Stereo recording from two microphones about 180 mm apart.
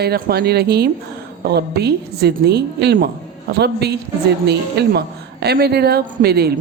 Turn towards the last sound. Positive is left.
turn(degrees=-60)  # may be behind; listen again after turning